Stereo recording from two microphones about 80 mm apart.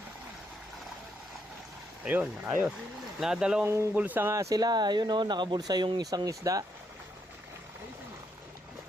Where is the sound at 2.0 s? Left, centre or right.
Centre.